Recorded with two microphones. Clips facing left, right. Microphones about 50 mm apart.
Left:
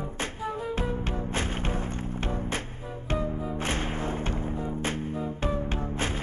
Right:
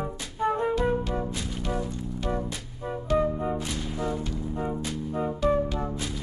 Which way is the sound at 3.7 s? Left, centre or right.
Left.